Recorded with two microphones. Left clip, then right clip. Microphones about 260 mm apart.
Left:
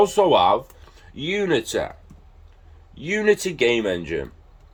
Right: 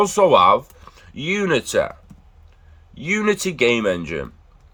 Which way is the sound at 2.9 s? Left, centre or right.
Centre.